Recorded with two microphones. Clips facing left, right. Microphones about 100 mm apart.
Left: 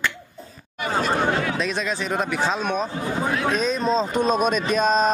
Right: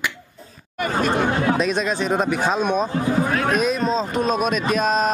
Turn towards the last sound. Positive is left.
turn(degrees=-5)  # may be behind; listen again after turning